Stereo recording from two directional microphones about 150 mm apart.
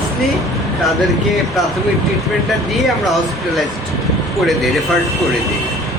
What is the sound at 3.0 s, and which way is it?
Speech, centre (ahead or behind).